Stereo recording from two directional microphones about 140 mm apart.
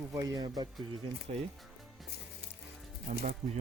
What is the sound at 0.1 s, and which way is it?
Speech, 25° right (ahead or behind).